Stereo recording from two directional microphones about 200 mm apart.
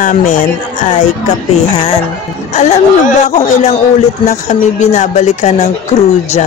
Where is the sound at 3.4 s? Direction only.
35° left (ahead or behind).